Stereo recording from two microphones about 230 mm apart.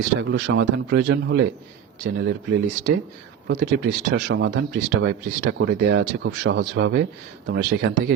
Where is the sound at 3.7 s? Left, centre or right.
Right.